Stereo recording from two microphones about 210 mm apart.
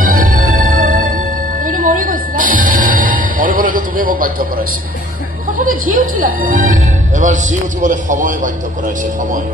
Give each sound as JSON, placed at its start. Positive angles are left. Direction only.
{"t": 0.0, "sound": "music", "side_deg": -40}
{"t": 5.6, "sound": "a woman's voice", "side_deg": -40}